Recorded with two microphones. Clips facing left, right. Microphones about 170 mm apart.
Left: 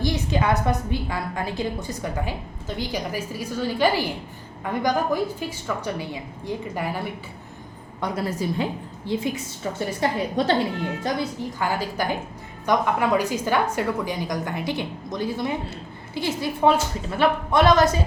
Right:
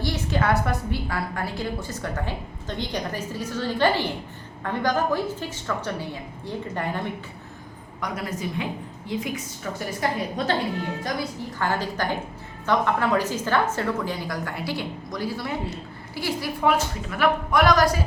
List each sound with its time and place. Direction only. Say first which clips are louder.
0.0 s a woman's voice: left 2 dB; 15° left (ahead or behind)
8.0 s a woman's voice: left 4 dB; 30° left (ahead or behind)
11.6 s a woman's voice: even; 10° left (ahead or behind)